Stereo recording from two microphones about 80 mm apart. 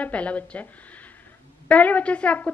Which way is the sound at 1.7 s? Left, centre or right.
Centre.